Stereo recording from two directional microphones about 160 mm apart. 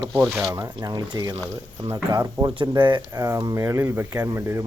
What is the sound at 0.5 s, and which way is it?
Speech, 20° right (ahead or behind).